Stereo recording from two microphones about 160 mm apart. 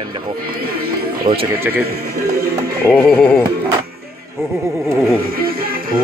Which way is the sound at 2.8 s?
5° left (ahead or behind).